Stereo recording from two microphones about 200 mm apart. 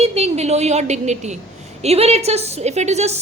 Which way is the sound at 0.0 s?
30° right (ahead or behind).